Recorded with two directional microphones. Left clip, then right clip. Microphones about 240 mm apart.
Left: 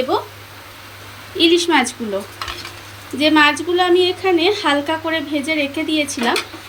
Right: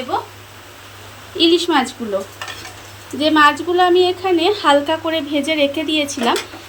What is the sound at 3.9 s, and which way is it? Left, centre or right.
A woman's voice, centre.